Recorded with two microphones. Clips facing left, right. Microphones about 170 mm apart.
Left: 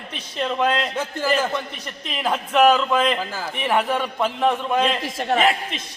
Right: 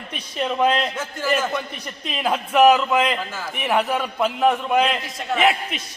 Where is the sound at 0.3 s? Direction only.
10° right (ahead or behind).